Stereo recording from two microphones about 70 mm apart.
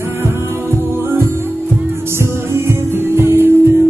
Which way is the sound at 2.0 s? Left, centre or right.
Right.